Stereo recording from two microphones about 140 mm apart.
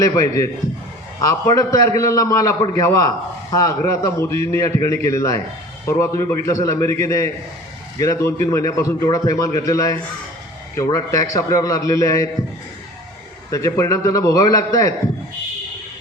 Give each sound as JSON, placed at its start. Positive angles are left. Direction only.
{"t": 0.0, "sound": "a man's voice", "side_deg": 25}
{"t": 13.5, "sound": "a man's voice", "side_deg": 25}